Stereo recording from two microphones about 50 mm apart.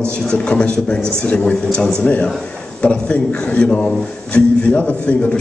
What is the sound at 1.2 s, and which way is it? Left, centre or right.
Speech, left.